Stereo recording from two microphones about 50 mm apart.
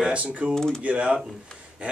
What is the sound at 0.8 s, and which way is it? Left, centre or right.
Speech, right.